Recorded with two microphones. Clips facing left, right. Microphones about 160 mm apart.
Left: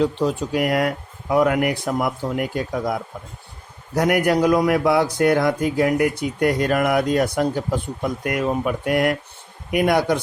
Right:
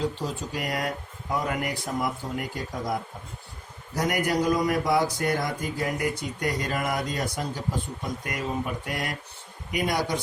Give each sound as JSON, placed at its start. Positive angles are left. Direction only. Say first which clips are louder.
{"t": 0.0, "sound": "a man's voice", "louder": "left 9 dB", "side_deg": 70}